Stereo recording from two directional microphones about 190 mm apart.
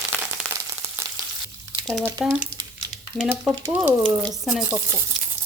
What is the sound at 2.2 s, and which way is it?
A woman's voice, 5° right (ahead or behind).